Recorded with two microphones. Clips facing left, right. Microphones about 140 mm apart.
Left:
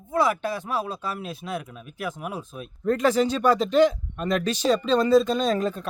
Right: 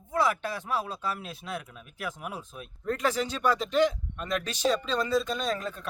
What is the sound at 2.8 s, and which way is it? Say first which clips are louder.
Speech: left 8 dB; 30° left (ahead or behind).